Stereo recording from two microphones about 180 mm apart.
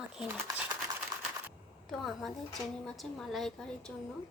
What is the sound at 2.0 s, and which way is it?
A woman's voice, centre (ahead or behind).